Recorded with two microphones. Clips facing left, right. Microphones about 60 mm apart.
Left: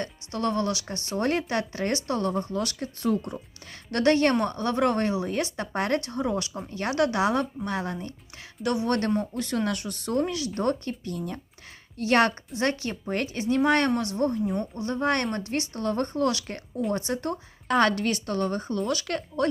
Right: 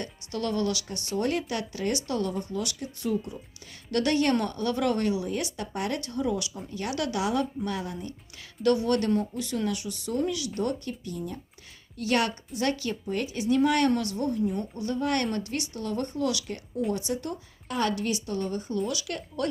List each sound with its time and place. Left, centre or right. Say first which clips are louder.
0.0 s a woman's voice: left 3 dB; left
7.9 s speech: left 3 dB; left
8.6 s speech: right 3 dB; left
8.9 s a woman's voice: even; left
9.3 s speech: left 2 dB; left
11.9 s a woman's voice: left 4 dB; left
13.1 s a woman's voice: left 1 dB; left
14.3 s speech: left 1 dB; left
14.8 s a woman's voice: left 1 dB; left